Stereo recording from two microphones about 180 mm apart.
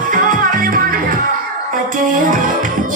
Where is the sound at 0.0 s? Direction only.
50° right (ahead or behind).